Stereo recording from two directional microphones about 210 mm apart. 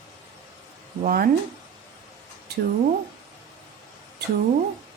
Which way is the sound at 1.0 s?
45° right (ahead or behind).